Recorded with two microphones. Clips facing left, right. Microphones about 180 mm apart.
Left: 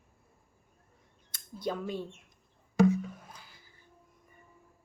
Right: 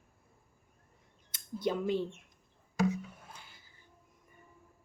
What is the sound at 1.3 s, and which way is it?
Speech, 25° right (ahead or behind).